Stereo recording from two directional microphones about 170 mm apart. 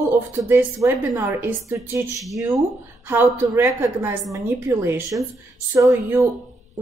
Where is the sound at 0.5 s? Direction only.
10° right (ahead or behind).